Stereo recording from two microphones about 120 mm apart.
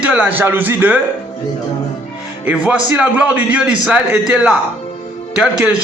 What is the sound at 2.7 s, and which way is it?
A man's voice, 15° right (ahead or behind).